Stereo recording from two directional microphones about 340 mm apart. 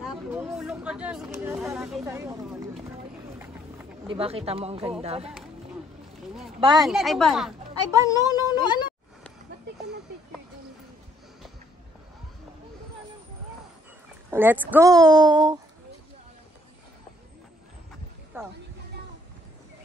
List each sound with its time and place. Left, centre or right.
0.1 s speech: centre
3.3 s a sound: centre
5.0 s a woman's voice: centre
6.8 s speech: centre
8.0 s speech: centre
14.3 s a woman's voice: centre
18.3 s speech: centre